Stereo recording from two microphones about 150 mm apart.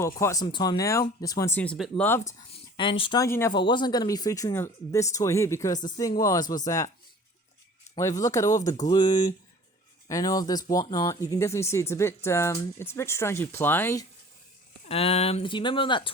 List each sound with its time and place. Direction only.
0.2 s speech: 20° left (ahead or behind)
2.5 s speech: 35° left (ahead or behind)
3.2 s speech: 15° left (ahead or behind)
3.5 s speech: 30° left (ahead or behind)
7.9 s speech: 20° left (ahead or behind)
14.8 s speech: 40° left (ahead or behind)